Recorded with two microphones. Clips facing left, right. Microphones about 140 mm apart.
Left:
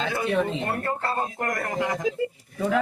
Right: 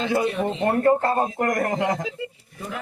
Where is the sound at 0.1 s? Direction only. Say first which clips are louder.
Right 1 dB; 25° right (ahead or behind).